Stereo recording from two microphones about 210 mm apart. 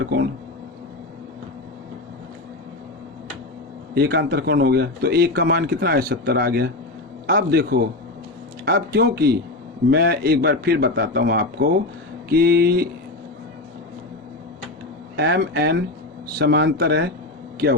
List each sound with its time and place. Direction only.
0.0 s a man's voice: 55° right (ahead or behind)
3.9 s a man's voice: 50° right (ahead or behind)
15.1 s a man's voice: 55° right (ahead or behind)